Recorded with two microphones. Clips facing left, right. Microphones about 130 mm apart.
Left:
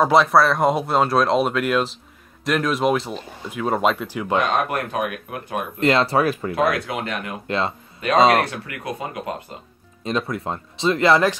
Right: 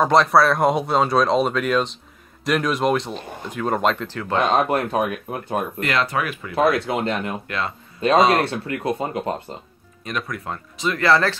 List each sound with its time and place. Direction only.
0.0 s speech: 5° left (ahead or behind)
4.4 s speech: 30° right (ahead or behind)
5.8 s speech: 25° left (ahead or behind)
6.5 s speech: 25° right (ahead or behind)
7.4 s speech: 25° left (ahead or behind)
8.5 s speech: 30° right (ahead or behind)
10.0 s speech: 25° left (ahead or behind)